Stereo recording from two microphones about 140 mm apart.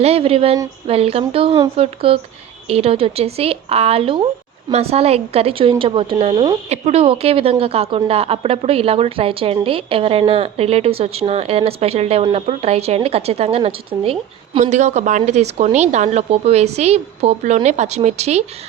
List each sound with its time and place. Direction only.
0.0 s speech: 45° right (ahead or behind)